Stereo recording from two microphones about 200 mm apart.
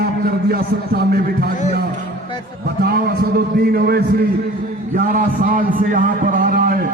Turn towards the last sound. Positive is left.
turn(degrees=-45)  # may be behind; listen again after turning